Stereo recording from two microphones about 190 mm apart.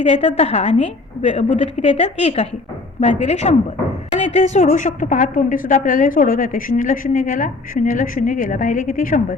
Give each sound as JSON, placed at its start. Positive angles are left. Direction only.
{"t": 0.0, "sound": "a woman's voice", "side_deg": 35}